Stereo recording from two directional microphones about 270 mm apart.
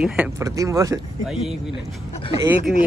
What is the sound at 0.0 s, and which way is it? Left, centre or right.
Speech, centre.